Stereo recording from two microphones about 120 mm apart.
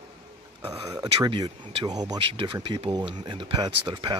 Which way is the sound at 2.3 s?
45° right (ahead or behind).